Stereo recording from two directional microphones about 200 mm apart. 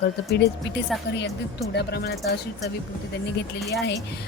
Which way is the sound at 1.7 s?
55° left (ahead or behind).